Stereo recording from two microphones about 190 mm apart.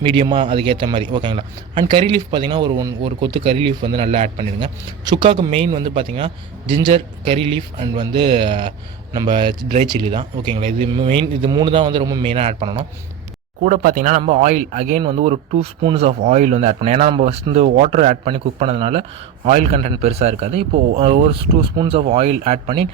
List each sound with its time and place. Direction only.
0.0 s speech: 25° right (ahead or behind)
13.6 s speech: 45° right (ahead or behind)